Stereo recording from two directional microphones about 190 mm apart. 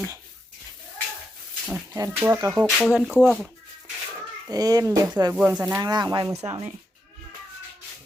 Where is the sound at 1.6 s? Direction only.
5° right (ahead or behind).